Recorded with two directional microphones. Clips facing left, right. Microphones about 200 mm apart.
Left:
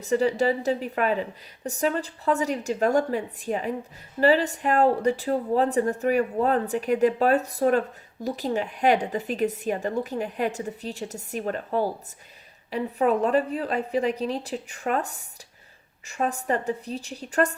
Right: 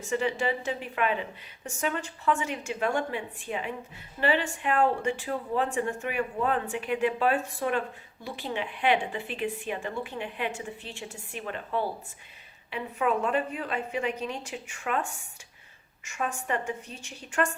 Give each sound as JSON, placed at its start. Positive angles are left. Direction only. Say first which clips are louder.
{"t": 0.0, "sound": "speech", "louder": "left 6 dB", "side_deg": 35}